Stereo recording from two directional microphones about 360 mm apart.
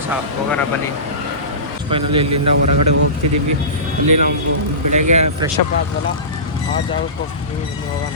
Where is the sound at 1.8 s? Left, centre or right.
Centre.